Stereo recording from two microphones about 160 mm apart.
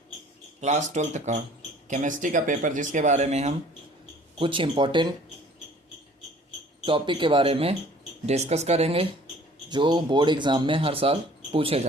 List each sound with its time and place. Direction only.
0.6 s speech: 45° right (ahead or behind)
4.4 s speech: 35° right (ahead or behind)
6.8 s speech: 30° right (ahead or behind)
9.6 s speech: 30° right (ahead or behind)